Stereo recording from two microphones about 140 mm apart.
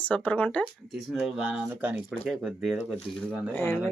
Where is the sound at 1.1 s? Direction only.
5° right (ahead or behind).